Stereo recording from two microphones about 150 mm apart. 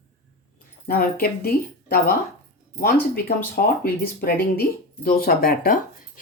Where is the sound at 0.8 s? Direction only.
85° left.